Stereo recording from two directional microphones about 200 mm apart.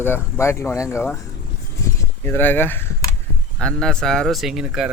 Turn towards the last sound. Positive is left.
turn(degrees=-5)  # may be behind; listen again after turning